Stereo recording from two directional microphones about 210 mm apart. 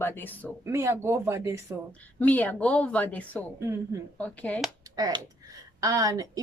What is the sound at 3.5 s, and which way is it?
Speech, 15° right (ahead or behind).